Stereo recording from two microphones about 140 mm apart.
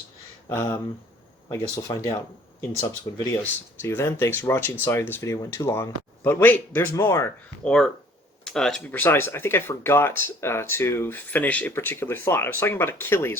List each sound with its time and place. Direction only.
0.4 s speech: 20° left (ahead or behind)
3.3 s speech: 15° left (ahead or behind)
7.6 s speech: 5° left (ahead or behind)